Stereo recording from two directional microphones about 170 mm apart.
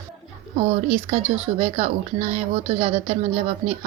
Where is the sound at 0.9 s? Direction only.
35° right (ahead or behind).